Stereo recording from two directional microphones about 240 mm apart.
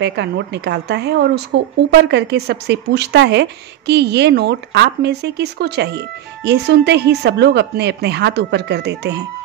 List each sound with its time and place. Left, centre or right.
0.0 s speech: right